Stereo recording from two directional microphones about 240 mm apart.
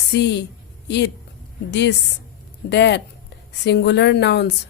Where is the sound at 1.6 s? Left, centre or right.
Left.